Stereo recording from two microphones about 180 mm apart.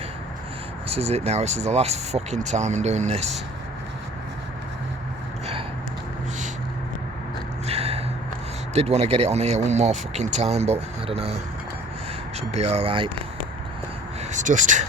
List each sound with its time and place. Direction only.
0.9 s speech: 35° right (ahead or behind)
7.7 s a sound: 35° right (ahead or behind)
8.7 s speech: 35° right (ahead or behind)
12.4 s speech: 35° right (ahead or behind)
14.3 s speech: 45° right (ahead or behind)